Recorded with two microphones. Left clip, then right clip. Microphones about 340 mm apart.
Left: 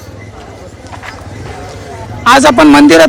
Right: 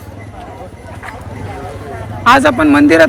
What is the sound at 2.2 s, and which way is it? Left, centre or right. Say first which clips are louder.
Speech: left 4 dB; centre.